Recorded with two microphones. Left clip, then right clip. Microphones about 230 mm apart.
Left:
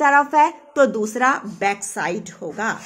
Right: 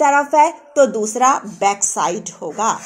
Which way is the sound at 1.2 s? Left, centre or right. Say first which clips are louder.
Right 4 dB; left.